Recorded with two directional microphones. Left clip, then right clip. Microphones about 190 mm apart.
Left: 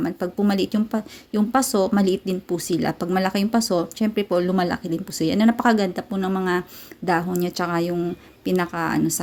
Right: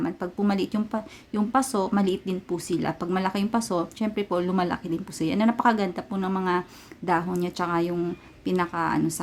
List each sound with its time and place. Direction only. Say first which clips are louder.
0.0 s speech: left 4 dB; 15° left (ahead or behind)